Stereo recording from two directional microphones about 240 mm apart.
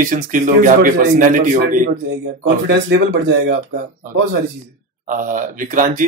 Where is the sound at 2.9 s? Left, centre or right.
Right.